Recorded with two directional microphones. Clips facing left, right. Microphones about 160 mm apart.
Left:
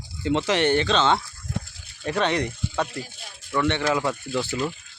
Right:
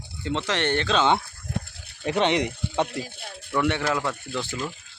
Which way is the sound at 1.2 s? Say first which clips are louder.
Even; 55° right (ahead or behind).